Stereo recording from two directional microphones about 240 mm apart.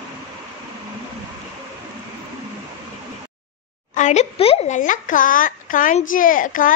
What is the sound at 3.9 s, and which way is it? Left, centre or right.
A woman's voice, left.